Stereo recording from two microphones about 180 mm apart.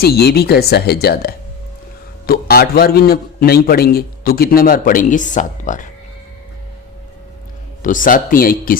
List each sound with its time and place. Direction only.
0.0 s a man's voice: 60° left (ahead or behind); by 5.8 s 45° left (ahead or behind)
7.8 s speech: 45° left (ahead or behind)